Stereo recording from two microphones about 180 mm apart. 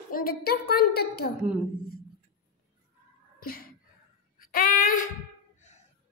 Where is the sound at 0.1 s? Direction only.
55° left (ahead or behind).